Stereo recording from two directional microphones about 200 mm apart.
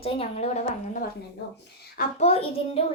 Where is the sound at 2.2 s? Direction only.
30° left (ahead or behind).